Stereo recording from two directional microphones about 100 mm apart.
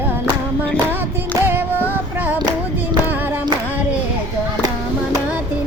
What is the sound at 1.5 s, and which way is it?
Music, 20° right (ahead or behind).